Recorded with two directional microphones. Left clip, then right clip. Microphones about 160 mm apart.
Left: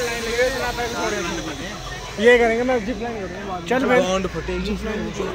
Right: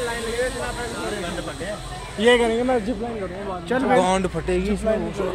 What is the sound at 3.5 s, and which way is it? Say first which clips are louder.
Speech: left 2 dB; 10° right (ahead or behind).